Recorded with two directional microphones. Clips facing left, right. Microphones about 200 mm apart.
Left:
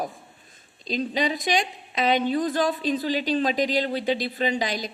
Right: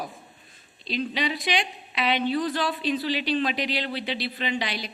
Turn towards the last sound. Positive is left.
turn(degrees=45)  # may be behind; listen again after turning